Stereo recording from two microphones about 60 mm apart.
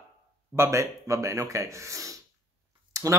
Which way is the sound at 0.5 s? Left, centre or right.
Right.